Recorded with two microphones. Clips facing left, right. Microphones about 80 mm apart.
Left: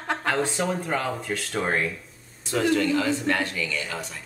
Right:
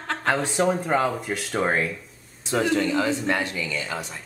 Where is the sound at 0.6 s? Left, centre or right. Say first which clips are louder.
Right 5 dB; centre.